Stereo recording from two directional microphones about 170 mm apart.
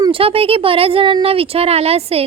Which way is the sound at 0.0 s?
35° right (ahead or behind).